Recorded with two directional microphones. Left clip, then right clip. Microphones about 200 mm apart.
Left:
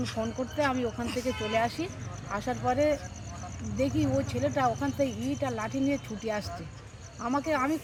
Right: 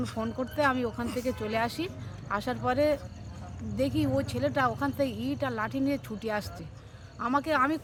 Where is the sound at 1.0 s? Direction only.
60° right (ahead or behind).